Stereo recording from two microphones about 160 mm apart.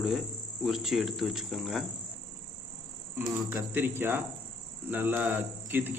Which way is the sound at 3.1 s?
10° right (ahead or behind).